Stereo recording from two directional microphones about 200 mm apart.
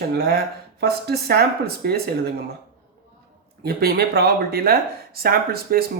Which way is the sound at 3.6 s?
50° right (ahead or behind).